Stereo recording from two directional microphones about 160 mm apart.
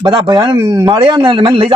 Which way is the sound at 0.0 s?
25° right (ahead or behind).